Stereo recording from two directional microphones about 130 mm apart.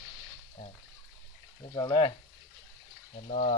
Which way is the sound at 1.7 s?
35° left (ahead or behind).